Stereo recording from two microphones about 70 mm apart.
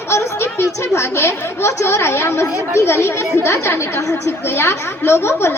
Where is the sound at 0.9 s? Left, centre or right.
Left.